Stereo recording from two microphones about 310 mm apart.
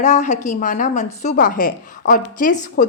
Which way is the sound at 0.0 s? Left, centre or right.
Left.